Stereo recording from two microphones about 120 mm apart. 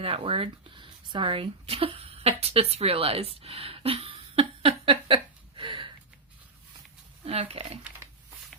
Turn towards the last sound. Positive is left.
turn(degrees=-55)  # may be behind; listen again after turning